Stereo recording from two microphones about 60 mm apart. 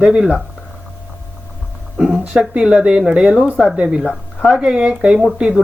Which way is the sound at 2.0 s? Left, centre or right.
Centre.